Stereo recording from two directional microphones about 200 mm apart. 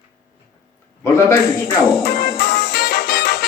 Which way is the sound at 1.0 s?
15° left (ahead or behind).